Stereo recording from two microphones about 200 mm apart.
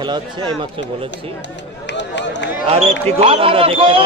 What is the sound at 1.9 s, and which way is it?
Run, 65° left (ahead or behind).